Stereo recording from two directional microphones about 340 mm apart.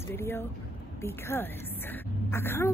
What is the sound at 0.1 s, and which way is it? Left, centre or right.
Speech, centre.